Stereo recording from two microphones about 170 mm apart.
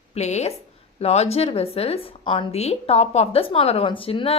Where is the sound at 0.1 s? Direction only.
40° left (ahead or behind).